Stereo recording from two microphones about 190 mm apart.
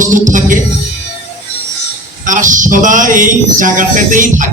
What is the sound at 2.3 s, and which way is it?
Speech, 45° right (ahead or behind).